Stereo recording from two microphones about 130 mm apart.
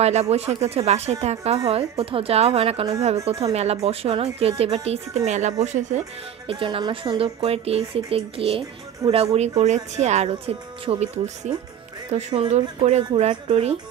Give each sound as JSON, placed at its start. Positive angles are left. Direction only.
{"t": 0.0, "sound": "a woman's voice", "side_deg": -55}
{"t": 6.4, "sound": "a woman's voice", "side_deg": -40}